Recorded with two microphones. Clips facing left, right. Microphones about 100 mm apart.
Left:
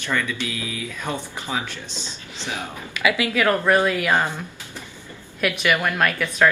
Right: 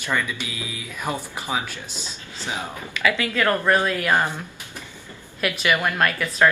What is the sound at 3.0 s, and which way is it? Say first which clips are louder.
A woman's voice: left 1 dB; 15° left (ahead or behind).